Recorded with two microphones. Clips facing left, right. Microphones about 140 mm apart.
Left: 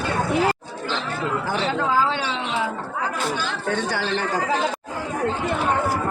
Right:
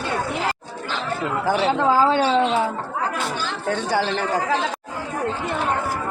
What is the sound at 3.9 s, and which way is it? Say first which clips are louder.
Speech: right 4 dB; 20° right (ahead or behind).